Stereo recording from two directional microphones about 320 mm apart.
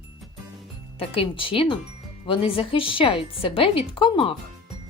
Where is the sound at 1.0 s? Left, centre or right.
Centre.